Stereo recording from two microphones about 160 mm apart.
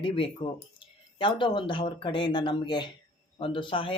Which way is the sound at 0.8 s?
30° left (ahead or behind).